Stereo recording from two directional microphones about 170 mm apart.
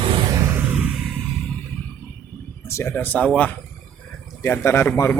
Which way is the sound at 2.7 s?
15° left (ahead or behind).